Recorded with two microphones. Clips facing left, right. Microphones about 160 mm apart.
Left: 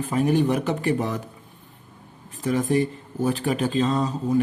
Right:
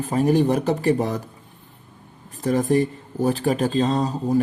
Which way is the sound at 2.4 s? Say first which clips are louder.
Right 2 dB; 40° right (ahead or behind).